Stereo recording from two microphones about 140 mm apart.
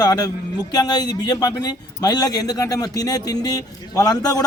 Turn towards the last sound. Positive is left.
turn(degrees=25)  # may be behind; listen again after turning